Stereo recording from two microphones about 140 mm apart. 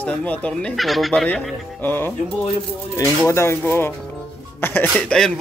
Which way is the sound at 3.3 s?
20° left (ahead or behind).